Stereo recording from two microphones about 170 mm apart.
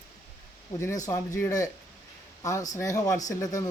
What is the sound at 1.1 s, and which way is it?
Speech, 15° left (ahead or behind).